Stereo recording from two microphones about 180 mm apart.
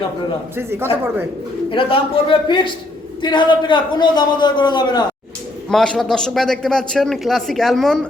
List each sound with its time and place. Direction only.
0.5 s speech: 10° right (ahead or behind)
1.7 s a man's voice: 30° left (ahead or behind)
5.6 s a man's voice: 5° left (ahead or behind)